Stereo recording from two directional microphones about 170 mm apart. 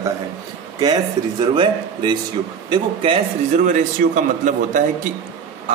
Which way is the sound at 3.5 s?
50° right (ahead or behind).